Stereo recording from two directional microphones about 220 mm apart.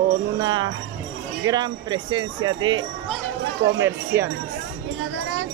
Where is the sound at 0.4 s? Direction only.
20° right (ahead or behind).